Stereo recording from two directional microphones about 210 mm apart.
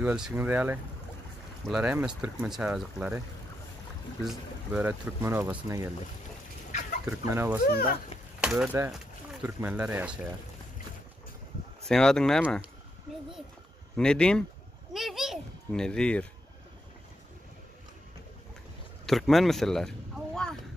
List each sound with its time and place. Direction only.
0.0 s speech: 5° right (ahead or behind)
4.2 s speech: 5° right (ahead or behind)
6.7 s fowl: 35° left (ahead or behind)
7.1 s speech: 10° right (ahead or behind)
11.8 s speech: centre (ahead or behind)
13.9 s speech: 5° left (ahead or behind)
14.9 s children playing: centre (ahead or behind)
19.0 s speech: centre (ahead or behind)